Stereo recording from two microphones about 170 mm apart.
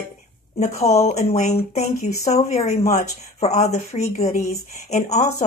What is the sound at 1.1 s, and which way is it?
Speech, 40° left (ahead or behind).